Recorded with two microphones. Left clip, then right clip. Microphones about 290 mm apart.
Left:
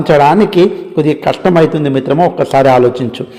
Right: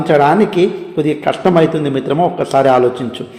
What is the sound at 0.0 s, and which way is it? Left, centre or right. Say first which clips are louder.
A man's voice: left 3 dB; left.